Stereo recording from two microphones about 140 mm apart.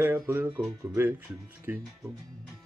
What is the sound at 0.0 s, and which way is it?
Speech, 15° right (ahead or behind).